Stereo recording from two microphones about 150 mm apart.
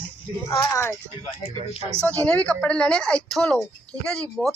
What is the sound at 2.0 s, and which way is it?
A woman's voice, 10° left (ahead or behind).